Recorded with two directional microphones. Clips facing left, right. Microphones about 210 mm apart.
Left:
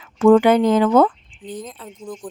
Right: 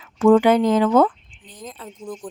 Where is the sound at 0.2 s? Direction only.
55° left (ahead or behind).